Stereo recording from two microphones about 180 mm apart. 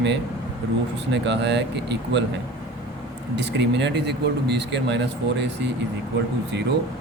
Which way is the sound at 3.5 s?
70° right (ahead or behind).